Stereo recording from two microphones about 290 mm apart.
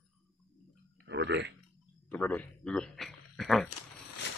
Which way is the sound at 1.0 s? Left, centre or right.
Right.